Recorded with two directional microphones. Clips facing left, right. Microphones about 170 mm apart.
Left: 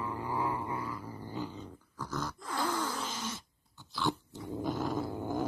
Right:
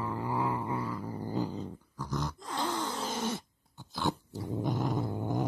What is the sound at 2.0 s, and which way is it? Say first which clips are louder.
Grunt: right 2 dB; 15° right (ahead or behind).